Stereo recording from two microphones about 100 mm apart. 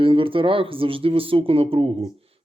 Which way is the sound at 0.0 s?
60° right (ahead or behind).